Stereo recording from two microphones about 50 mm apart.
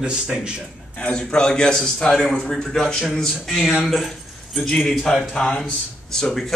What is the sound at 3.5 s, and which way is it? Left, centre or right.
Speech, centre.